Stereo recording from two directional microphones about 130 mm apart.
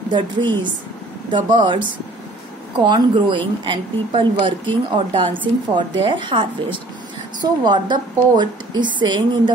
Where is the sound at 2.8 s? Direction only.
35° right (ahead or behind).